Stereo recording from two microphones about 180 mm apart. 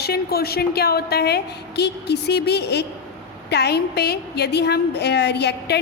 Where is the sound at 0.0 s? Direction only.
60° left (ahead or behind).